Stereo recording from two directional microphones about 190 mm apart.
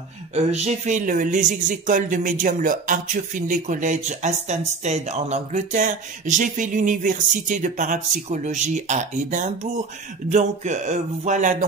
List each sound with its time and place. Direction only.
0.3 s speech: 35° right (ahead or behind)